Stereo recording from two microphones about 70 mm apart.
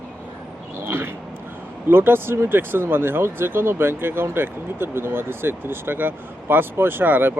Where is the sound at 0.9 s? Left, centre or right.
Right.